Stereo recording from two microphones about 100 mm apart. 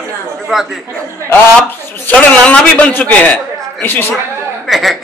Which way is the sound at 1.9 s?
15° left (ahead or behind).